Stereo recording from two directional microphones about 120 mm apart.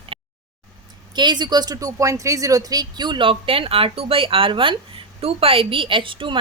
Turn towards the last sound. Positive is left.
turn(degrees=-45)  # may be behind; listen again after turning